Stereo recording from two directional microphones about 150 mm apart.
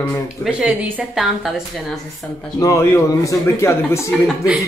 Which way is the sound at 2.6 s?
20° left (ahead or behind).